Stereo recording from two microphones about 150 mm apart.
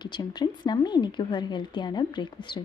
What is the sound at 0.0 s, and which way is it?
A woman's voice, 30° left (ahead or behind).